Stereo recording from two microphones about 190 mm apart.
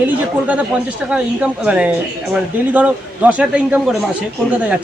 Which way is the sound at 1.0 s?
5° right (ahead or behind).